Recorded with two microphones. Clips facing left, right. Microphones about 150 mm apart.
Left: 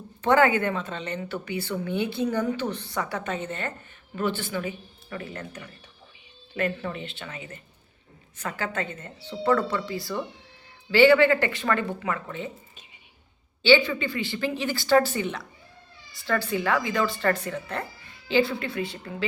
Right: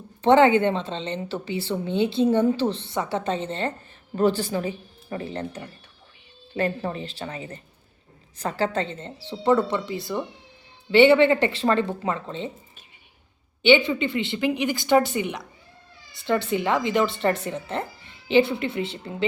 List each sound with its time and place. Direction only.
0.2 s a woman's voice: 25° right (ahead or behind)
13.6 s a woman's voice: 20° right (ahead or behind)